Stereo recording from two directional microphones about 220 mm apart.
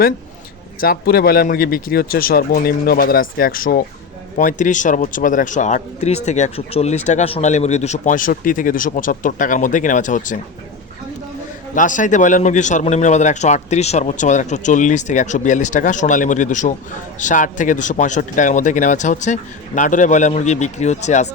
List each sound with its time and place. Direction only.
0.8 s a man's voice: 45° left (ahead or behind)
11.7 s a man's voice: 35° left (ahead or behind)